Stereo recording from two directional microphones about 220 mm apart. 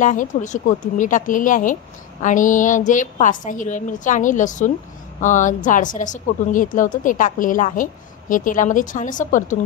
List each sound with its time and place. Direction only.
0.0 s speech: 35° left (ahead or behind)